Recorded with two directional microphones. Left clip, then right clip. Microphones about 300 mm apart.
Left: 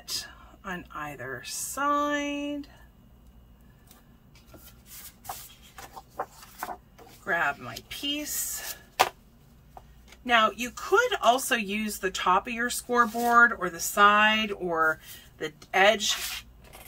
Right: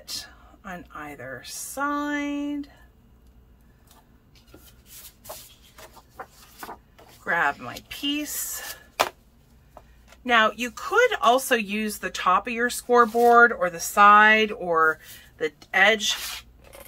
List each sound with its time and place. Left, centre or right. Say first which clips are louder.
0.1 s a woman's voice: left 1 dB; centre
7.2 s speech: right 4 dB; centre
10.2 s speech: right 3 dB; centre